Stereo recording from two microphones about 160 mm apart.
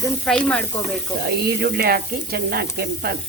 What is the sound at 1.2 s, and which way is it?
Speech, 85° right.